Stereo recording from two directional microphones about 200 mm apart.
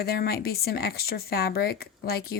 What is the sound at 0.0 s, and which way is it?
Speech, 50° left (ahead or behind).